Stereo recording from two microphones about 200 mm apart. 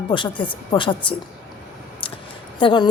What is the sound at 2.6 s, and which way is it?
Speech, 20° left (ahead or behind).